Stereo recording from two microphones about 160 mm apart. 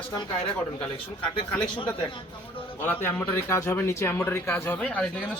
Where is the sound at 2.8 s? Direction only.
15° left (ahead or behind).